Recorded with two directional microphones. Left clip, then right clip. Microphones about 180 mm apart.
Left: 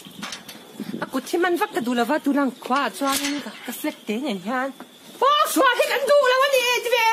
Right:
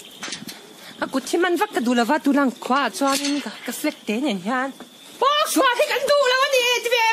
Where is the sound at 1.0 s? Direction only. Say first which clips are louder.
Right 2 dB; 40° right (ahead or behind).